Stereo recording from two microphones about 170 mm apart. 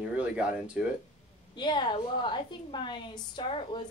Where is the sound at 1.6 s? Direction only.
25° left (ahead or behind).